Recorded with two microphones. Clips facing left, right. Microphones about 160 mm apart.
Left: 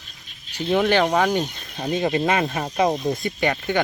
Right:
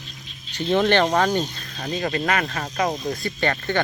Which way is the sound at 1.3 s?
15° left (ahead or behind).